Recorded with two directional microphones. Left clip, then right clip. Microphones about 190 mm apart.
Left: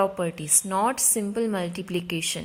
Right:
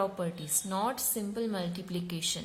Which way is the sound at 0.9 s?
20° left (ahead or behind).